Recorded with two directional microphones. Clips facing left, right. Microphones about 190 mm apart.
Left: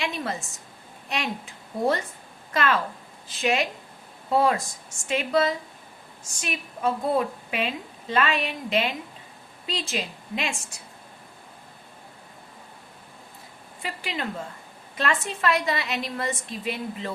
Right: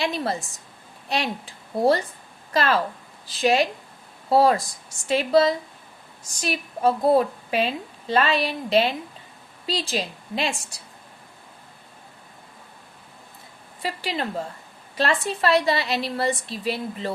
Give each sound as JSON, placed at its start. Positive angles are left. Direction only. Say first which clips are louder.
{"t": 0.0, "sound": "a woman's voice", "louder": "right 4 dB", "side_deg": -35}
{"t": 13.8, "sound": "a woman's voice", "louder": "right 4 dB", "side_deg": -35}